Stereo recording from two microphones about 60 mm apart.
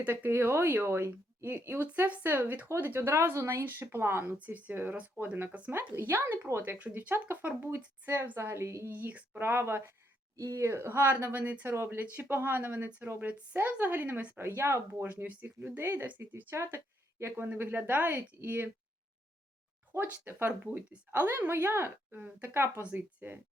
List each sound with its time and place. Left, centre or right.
0.0 s a woman's voice: right
2.0 s a woman's voice: right
3.1 s speech: right
4.4 s speech: right
4.7 s a woman's voice: right
6.6 s a woman's voice: right
8.9 s a woman's voice: right
10.3 s speech: right
11.3 s a woman's voice: right
11.7 s a woman's voice: right
14.3 s speech: right
15.0 s a woman's voice: right
19.9 s a woman's voice: right